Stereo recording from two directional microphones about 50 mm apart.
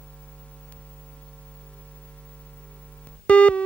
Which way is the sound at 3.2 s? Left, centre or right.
Left.